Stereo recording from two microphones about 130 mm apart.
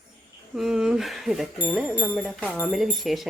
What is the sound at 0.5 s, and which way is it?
Speech, centre (ahead or behind).